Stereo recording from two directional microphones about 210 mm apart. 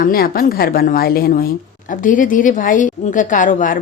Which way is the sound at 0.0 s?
45° left (ahead or behind).